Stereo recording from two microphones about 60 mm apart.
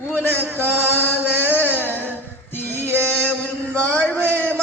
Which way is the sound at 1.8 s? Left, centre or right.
Left.